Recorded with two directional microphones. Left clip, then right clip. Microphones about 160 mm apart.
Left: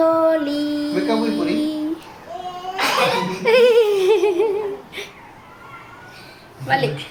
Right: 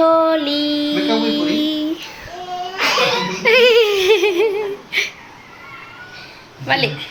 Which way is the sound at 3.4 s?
Centre (ahead or behind).